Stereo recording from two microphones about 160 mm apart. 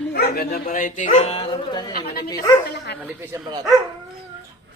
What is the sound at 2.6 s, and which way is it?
Dog, 90° left.